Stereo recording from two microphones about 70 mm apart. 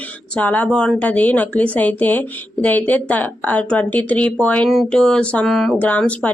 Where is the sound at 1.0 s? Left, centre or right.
Left.